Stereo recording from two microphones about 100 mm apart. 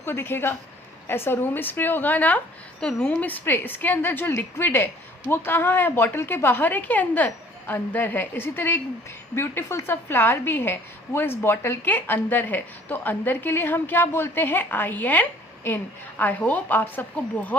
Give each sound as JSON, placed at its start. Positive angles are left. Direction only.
{"t": 0.0, "sound": "a woman's voice", "side_deg": 25}